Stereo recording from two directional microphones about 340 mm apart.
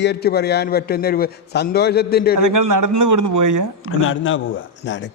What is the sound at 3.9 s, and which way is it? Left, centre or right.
Speech, left.